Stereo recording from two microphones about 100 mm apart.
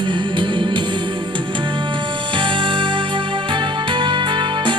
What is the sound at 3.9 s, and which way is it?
Music, 55° right (ahead or behind).